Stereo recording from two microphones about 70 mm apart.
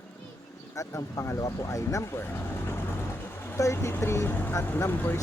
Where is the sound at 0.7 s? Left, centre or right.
Left.